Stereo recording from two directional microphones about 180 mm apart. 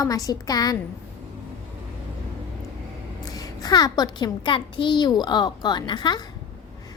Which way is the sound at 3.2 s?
20° left (ahead or behind).